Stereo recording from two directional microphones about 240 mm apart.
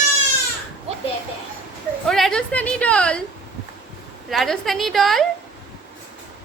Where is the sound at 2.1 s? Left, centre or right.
Centre.